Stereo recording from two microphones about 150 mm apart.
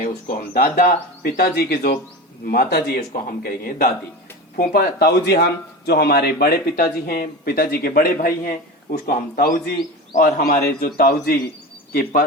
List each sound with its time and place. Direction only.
0.0 s speech: 70° left (ahead or behind)
4.5 s speech: 90° left
10.1 s a man's voice: 60° left (ahead or behind)
10.8 s a man's voice: 90° left